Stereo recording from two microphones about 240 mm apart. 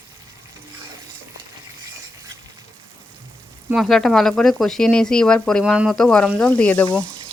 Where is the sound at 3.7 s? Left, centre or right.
Centre.